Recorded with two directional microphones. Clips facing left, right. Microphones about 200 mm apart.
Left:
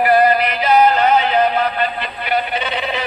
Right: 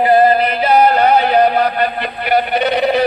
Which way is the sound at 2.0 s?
60° right (ahead or behind).